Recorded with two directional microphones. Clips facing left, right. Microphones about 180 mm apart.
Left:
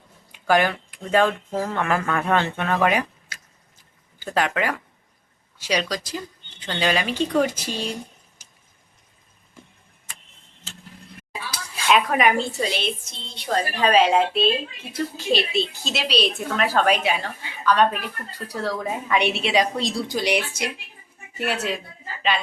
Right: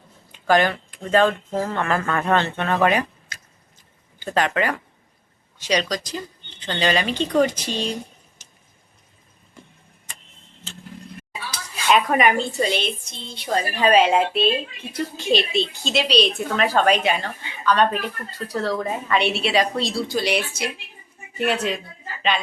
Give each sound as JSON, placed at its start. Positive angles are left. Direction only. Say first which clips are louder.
{"t": 0.3, "sound": "a sound", "louder": "right 1 dB", "side_deg": 10}
{"t": 1.1, "sound": "a woman's voice", "louder": "right 2 dB", "side_deg": 10}
{"t": 3.3, "sound": "a sound", "louder": "right 1 dB", "side_deg": 5}
{"t": 4.2, "sound": "a woman's voice", "louder": "right 2 dB", "side_deg": 5}
{"t": 11.5, "sound": "a woman's voice", "louder": "right 1 dB", "side_deg": 0}
{"t": 21.3, "sound": "speech", "louder": "right 3 dB", "side_deg": 5}